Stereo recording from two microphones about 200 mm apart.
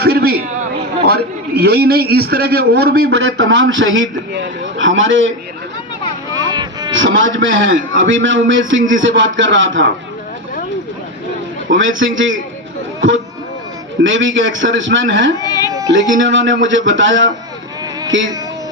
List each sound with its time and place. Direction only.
0.0 s a sound: 50° right (ahead or behind)
1.0 s a man's voice: 50° right (ahead or behind); by 5.3 s 70° right (ahead or behind)
6.4 s a sound: 20° right (ahead or behind)
6.9 s a man's voice: 75° right (ahead or behind)
11.7 s a man's voice: 75° right (ahead or behind)
14.0 s a man's voice: 70° right (ahead or behind)
15.4 s music: 20° right (ahead or behind)
15.9 s a man's voice: 70° right (ahead or behind)